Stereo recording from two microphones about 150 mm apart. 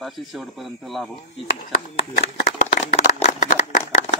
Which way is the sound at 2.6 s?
55° left (ahead or behind).